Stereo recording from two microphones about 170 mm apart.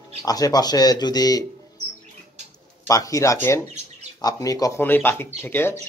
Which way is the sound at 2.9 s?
20° left (ahead or behind).